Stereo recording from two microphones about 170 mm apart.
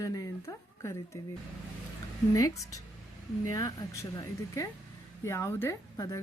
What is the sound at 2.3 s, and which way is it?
A woman's voice, 20° left (ahead or behind).